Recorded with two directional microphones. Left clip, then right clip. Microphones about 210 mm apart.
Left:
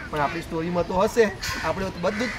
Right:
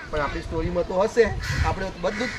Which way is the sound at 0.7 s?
50° left (ahead or behind).